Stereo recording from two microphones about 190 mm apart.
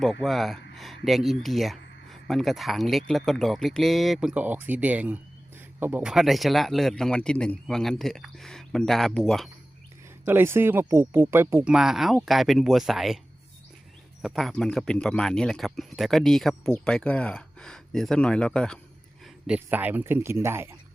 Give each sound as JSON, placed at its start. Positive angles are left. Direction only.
{"t": 0.0, "sound": "speech", "side_deg": 0}
{"t": 10.2, "sound": "speech", "side_deg": -10}
{"t": 14.2, "sound": "speech", "side_deg": 0}
{"t": 19.5, "sound": "speech", "side_deg": -10}